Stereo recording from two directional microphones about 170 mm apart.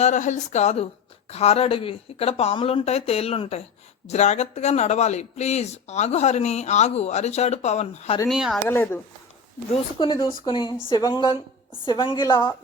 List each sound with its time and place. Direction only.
0.0 s speech: 45° left (ahead or behind)
8.3 s speech: 5° right (ahead or behind)
8.6 s speech: 15° left (ahead or behind)
9.7 s a woman's voice: 30° left (ahead or behind)